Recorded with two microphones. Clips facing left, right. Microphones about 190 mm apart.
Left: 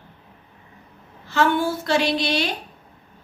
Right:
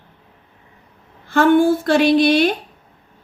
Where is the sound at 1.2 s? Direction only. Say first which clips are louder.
Right 8 dB; 50° right (ahead or behind).